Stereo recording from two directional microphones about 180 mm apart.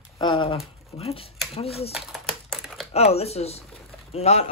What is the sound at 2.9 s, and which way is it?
Speech, 35° left (ahead or behind).